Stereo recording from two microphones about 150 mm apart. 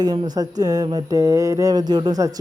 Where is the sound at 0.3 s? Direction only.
25° right (ahead or behind).